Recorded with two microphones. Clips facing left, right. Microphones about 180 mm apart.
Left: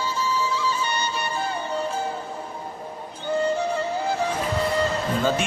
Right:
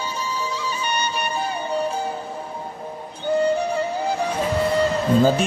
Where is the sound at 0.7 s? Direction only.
15° right (ahead or behind).